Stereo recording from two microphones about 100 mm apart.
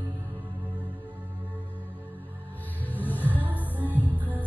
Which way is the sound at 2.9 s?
20° left (ahead or behind).